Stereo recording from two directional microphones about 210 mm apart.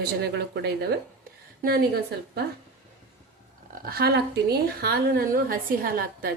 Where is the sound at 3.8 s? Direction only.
50° right (ahead or behind).